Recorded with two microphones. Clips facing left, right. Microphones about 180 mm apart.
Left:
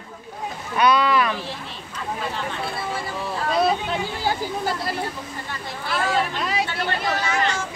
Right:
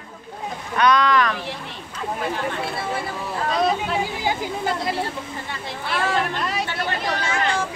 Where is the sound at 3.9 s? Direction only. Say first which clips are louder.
Right 1 dB; 15° right (ahead or behind).